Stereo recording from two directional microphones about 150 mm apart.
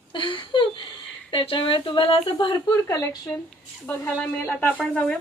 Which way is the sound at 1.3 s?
35° left (ahead or behind).